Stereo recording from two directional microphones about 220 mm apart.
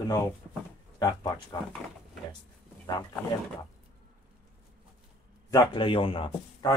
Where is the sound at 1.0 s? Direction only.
15° left (ahead or behind).